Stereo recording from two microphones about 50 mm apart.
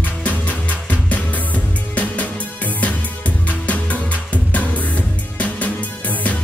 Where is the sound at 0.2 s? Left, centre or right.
Left.